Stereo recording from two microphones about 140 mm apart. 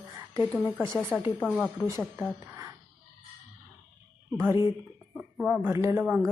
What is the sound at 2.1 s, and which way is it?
Speech, 20° right (ahead or behind).